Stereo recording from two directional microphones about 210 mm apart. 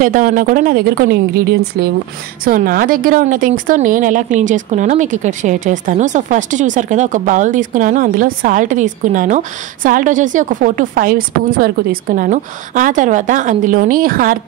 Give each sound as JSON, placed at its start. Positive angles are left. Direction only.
{"t": 0.0, "sound": "a woman's voice", "side_deg": -40}